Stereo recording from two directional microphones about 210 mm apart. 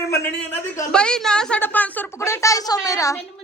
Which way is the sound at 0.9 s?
5° left (ahead or behind).